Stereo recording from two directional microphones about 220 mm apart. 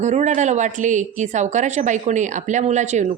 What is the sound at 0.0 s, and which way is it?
Speech, 30° right (ahead or behind).